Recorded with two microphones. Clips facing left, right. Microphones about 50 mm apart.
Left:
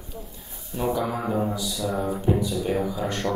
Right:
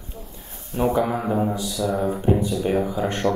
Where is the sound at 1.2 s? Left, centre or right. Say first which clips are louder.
Right 3 dB; centre.